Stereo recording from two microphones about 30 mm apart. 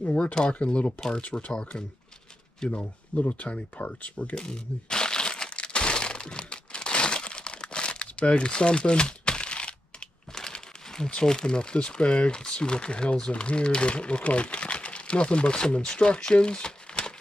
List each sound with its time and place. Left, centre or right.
0.2 s speech: left
3.2 s speech: left
4.4 s a sound: left
11.2 s speech: left